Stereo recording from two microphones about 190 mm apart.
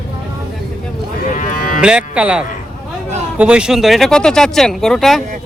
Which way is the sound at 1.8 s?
5° right (ahead or behind).